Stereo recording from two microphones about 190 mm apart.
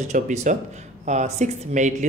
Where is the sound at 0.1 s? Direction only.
40° right (ahead or behind).